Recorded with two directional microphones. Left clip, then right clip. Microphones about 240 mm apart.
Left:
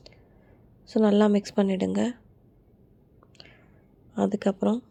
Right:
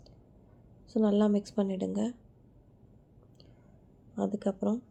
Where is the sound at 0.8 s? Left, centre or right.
Left.